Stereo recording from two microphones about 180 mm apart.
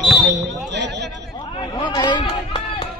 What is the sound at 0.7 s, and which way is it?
Speech, 75° right (ahead or behind).